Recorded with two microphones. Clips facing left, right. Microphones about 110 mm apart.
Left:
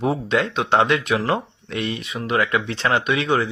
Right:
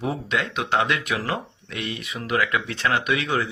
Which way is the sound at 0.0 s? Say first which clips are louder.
Left 5 dB; 30° left (ahead or behind).